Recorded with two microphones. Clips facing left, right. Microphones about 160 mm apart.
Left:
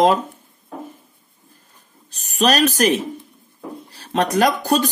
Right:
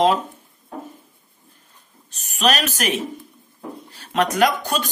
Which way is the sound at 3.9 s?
35° left (ahead or behind).